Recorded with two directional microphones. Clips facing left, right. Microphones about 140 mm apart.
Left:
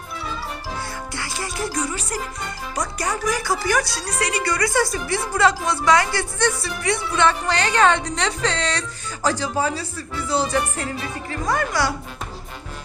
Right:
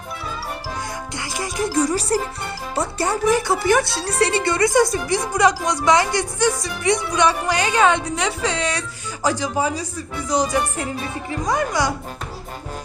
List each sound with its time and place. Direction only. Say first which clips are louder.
1.1 s music: right 4 dB; 20° right (ahead or behind)
1.7 s speech: right 7 dB; 35° right (ahead or behind); by 11.9 s 20° right (ahead or behind)